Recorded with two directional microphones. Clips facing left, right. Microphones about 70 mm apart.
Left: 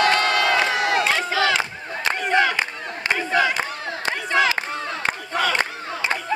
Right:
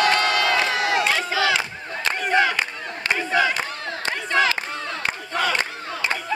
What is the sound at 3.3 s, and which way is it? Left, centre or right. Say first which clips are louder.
Battle cry: even; centre.